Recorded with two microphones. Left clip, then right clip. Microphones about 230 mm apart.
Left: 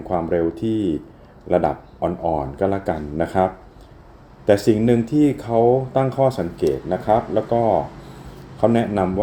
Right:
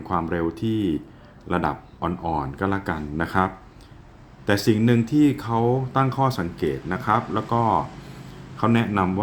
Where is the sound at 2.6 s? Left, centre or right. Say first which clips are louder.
Left 4 dB; centre.